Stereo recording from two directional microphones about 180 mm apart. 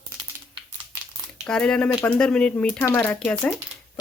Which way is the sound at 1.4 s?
5° left (ahead or behind).